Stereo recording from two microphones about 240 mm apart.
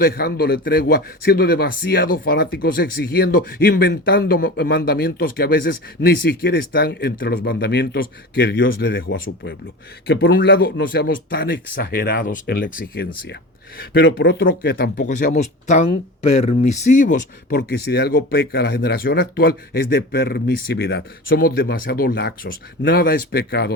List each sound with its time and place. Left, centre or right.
0.0 s speech: left
17.6 s speech: left